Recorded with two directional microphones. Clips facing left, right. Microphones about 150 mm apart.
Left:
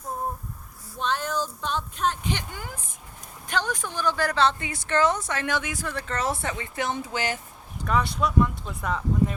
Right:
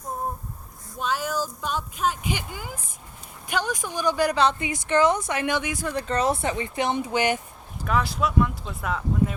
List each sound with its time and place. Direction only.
0.9 s speech: 5° right (ahead or behind)
7.9 s speech: centre (ahead or behind)